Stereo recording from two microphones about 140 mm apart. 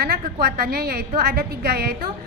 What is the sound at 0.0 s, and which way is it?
A woman's voice, 90° right.